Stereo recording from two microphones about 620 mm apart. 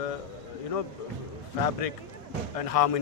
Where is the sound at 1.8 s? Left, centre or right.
Left.